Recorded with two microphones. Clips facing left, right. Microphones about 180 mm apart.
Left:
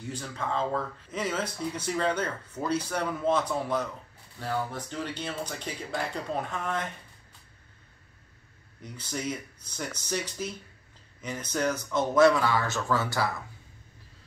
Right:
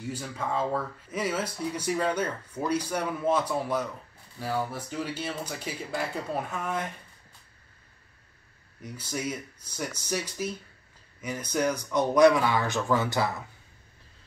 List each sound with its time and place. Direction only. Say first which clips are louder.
0.1 s speech: even; 10° right (ahead or behind)
8.8 s speech: right 1 dB; 10° right (ahead or behind)